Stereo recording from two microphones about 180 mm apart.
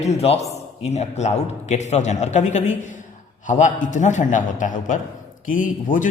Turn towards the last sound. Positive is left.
turn(degrees=45)  # may be behind; listen again after turning